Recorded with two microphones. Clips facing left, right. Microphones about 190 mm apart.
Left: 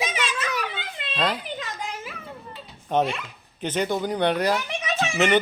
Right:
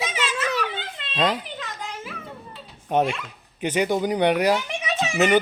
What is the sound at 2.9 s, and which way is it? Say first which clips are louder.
A child's voice: right 1 dB; 10° right (ahead or behind).